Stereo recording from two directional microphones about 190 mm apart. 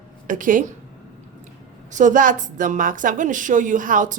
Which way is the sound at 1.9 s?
40° right (ahead or behind).